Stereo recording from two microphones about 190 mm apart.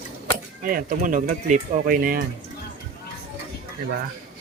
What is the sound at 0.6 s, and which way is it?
Speech, 45° right (ahead or behind).